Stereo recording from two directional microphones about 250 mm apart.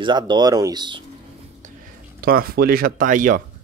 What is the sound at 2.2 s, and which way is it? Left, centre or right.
Speech, right.